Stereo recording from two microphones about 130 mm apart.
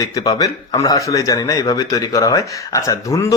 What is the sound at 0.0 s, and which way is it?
Speech, 30° left (ahead or behind).